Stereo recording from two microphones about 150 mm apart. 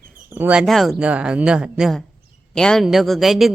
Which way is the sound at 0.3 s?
10° right (ahead or behind).